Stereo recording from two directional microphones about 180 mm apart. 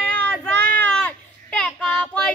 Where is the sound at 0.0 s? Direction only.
10° left (ahead or behind).